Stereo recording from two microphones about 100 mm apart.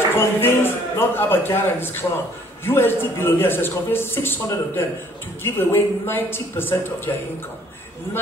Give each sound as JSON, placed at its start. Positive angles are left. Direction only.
{"t": 0.1, "sound": "a man's voice", "side_deg": 25}